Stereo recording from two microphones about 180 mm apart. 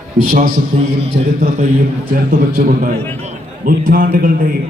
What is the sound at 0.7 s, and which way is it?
Speech, 40° right (ahead or behind).